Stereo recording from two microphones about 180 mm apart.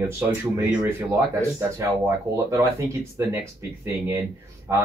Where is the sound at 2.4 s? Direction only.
15° right (ahead or behind).